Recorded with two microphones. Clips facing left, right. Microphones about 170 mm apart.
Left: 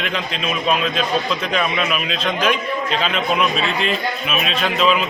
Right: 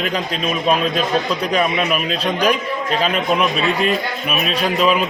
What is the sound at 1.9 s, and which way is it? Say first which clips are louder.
A man's voice: right 2 dB; 40° right (ahead or behind).